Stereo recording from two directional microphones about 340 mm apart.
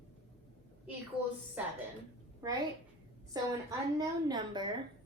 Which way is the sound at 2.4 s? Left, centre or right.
Centre.